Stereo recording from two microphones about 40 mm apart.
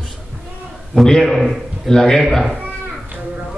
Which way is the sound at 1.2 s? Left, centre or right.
Centre.